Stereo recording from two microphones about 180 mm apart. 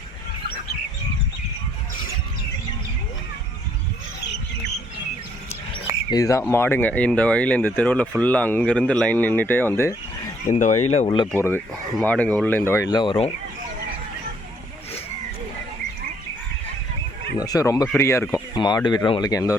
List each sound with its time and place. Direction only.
6.1 s speech: 20° left (ahead or behind)
10.5 s speech: 40° left (ahead or behind)
11.3 s speech: 10° left (ahead or behind)
13.0 s speech: 30° left (ahead or behind)
17.3 s speech: 20° left (ahead or behind)